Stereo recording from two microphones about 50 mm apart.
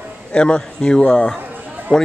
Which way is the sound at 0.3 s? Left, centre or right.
Left.